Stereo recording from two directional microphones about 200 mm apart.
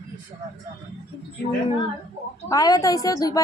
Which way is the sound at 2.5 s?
20° left (ahead or behind).